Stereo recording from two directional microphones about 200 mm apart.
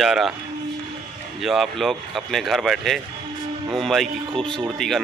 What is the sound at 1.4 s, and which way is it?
Speech, centre (ahead or behind).